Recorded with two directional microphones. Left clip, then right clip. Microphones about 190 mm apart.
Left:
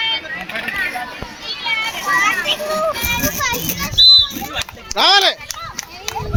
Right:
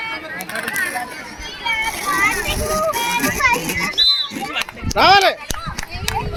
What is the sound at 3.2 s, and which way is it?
Speech, 35° left (ahead or behind).